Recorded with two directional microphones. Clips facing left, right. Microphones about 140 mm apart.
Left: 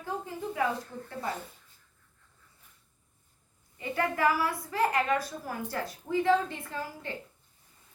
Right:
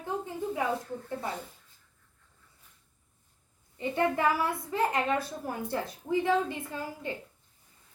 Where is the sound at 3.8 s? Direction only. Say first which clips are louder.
Right 1 dB; 25° right (ahead or behind).